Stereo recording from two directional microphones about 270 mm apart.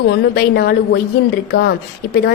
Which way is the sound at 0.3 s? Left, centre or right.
Left.